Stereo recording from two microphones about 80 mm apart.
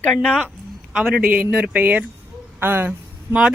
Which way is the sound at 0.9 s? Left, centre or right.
Centre.